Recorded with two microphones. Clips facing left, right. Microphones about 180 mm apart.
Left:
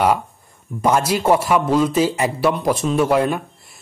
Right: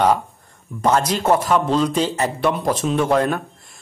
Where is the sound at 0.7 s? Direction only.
10° left (ahead or behind).